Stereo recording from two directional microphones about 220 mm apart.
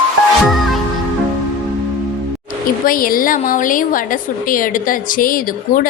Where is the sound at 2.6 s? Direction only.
40° left (ahead or behind).